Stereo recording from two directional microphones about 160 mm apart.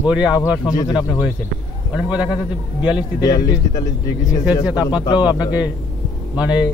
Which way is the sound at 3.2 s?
25° left (ahead or behind).